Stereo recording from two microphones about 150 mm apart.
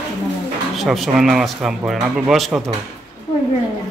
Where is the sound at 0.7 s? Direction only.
Centre (ahead or behind).